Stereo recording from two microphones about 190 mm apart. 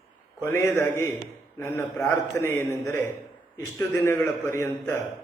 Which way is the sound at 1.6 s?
15° left (ahead or behind).